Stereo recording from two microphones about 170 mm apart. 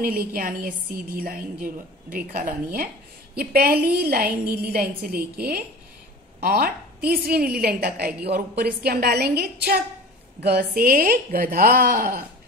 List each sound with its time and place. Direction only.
0.3 s a woman's voice: 60° right (ahead or behind)